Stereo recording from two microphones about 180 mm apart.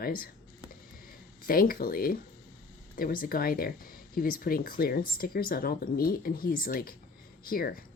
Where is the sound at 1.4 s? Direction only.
55° left (ahead or behind).